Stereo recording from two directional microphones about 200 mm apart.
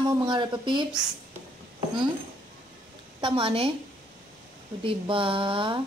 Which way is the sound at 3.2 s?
25° right (ahead or behind).